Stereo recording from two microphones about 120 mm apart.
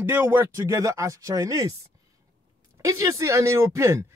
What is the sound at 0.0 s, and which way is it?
Speech, 20° right (ahead or behind).